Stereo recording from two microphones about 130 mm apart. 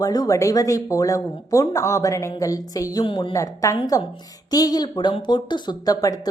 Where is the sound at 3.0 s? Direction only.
40° left (ahead or behind).